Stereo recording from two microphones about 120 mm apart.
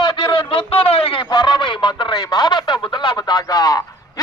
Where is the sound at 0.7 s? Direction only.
50° left (ahead or behind).